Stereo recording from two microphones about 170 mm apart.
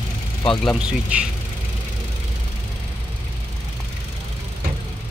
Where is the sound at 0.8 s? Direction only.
5° right (ahead or behind).